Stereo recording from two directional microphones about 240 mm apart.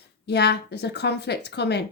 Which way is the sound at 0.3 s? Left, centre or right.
Left.